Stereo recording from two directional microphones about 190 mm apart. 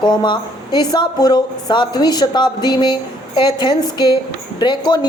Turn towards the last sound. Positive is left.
turn(degrees=25)  # may be behind; listen again after turning